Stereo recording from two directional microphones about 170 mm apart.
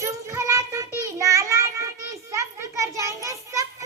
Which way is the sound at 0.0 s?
20° right (ahead or behind).